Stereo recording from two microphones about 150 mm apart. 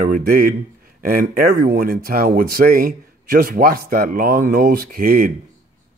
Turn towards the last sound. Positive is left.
turn(degrees=-75)  # may be behind; listen again after turning